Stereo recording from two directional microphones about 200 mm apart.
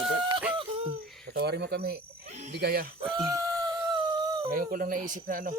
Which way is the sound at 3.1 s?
15° right (ahead or behind).